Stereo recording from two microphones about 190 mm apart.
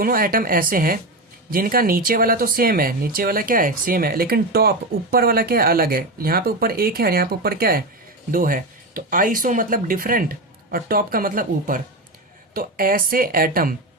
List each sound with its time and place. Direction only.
0.0 s speech: 50° right (ahead or behind)